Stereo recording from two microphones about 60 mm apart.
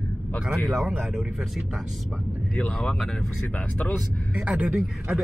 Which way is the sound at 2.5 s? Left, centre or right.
Centre.